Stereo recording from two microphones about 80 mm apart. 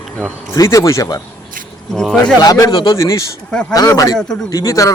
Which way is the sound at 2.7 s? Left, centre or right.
Left.